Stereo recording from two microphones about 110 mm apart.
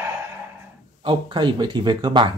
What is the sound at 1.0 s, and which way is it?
Speech, 50° right (ahead or behind).